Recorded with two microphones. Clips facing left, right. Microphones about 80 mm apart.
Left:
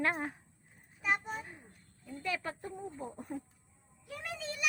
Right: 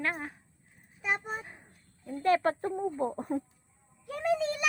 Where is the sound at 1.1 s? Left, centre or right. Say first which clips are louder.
Right 1 dB; right.